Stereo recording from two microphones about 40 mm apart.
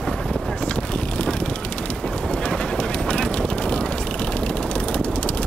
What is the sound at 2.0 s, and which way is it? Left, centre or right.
Duck, left.